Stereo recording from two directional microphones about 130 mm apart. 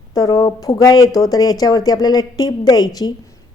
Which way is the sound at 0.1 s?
30° left (ahead or behind).